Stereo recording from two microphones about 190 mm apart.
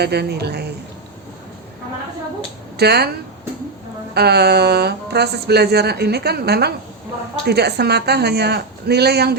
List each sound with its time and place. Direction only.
0.0 s speech: 60° right (ahead or behind)
2.7 s speech: 60° right (ahead or behind)
4.1 s speech: 60° right (ahead or behind)